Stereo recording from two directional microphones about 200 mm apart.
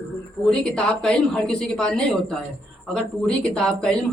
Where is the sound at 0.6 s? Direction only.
5° left (ahead or behind).